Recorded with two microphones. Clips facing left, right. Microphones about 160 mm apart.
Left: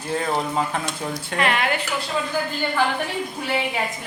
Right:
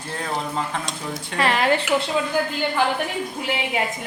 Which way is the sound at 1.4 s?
35° right (ahead or behind).